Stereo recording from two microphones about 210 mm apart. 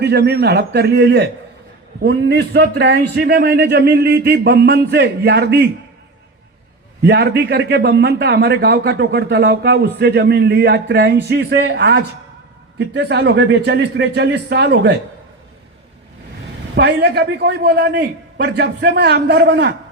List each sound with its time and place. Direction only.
0.0 s a man's voice: 50° right (ahead or behind)
7.0 s a man's voice: 55° right (ahead or behind)
13.0 s a man's voice: 55° right (ahead or behind)
16.7 s a man's voice: 50° right (ahead or behind)